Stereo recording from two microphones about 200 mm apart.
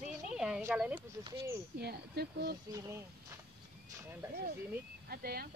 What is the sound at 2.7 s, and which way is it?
Speech, 15° right (ahead or behind).